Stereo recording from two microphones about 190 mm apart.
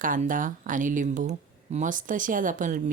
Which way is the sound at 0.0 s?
45° right (ahead or behind).